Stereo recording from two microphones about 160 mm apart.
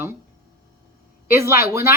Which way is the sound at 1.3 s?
15° right (ahead or behind).